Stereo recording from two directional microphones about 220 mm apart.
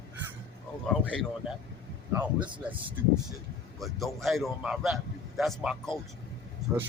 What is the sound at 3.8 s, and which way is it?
A man's voice, centre (ahead or behind).